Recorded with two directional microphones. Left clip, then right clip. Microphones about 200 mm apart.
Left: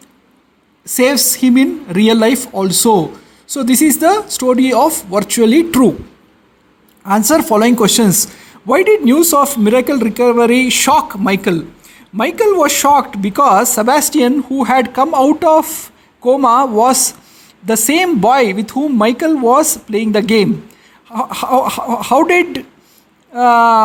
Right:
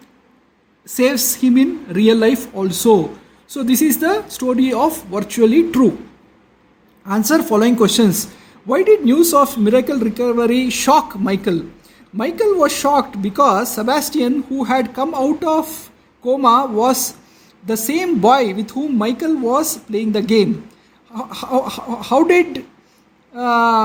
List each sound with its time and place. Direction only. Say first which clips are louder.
0.9 s a man's voice: left 4 dB; 35° left (ahead or behind)
7.0 s a man's voice: left 5 dB; 35° left (ahead or behind)